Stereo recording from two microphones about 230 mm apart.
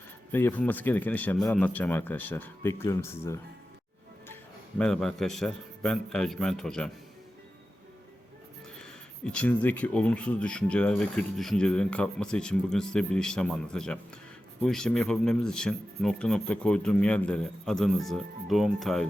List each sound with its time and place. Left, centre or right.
0.3 s speech: centre
4.8 s speech: centre
8.8 s speech: centre